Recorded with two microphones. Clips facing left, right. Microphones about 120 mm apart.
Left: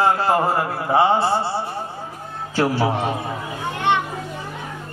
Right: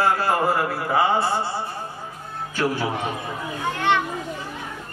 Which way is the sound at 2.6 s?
30° left (ahead or behind).